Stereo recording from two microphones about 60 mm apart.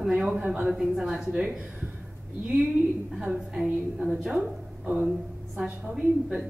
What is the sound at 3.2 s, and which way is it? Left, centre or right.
A woman's voice, centre.